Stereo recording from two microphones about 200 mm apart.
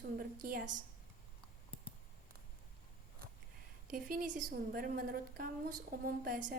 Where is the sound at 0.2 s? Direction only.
45° right (ahead or behind).